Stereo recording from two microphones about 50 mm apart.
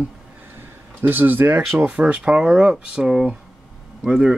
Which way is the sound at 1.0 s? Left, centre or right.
Right.